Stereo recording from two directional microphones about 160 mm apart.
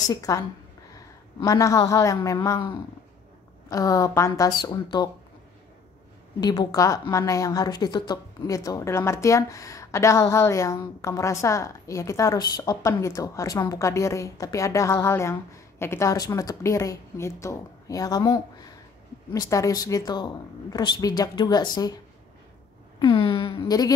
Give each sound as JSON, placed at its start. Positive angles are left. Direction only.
{"t": 0.1, "sound": "a woman's voice", "side_deg": 20}
{"t": 3.7, "sound": "a woman's voice", "side_deg": 20}
{"t": 6.4, "sound": "a woman's voice", "side_deg": 25}
{"t": 22.9, "sound": "speech", "side_deg": 30}